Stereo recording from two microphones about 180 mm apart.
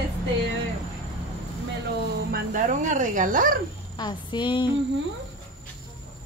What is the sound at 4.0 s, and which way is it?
Speech, 25° left (ahead or behind).